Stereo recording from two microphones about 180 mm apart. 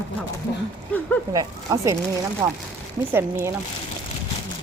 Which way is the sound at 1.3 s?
20° right (ahead or behind).